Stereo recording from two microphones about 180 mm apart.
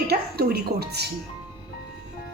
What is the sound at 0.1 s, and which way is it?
Speech, 60° right (ahead or behind).